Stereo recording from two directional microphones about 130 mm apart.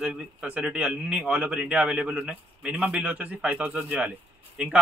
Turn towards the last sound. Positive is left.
turn(degrees=-10)  # may be behind; listen again after turning